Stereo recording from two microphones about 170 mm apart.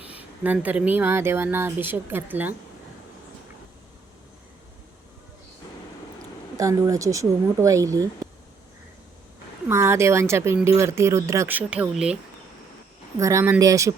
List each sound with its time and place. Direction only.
0.4 s speech: 10° right (ahead or behind)
6.6 s speech: 20° right (ahead or behind)
9.6 s speech: 15° right (ahead or behind)
13.1 s speech: 20° right (ahead or behind)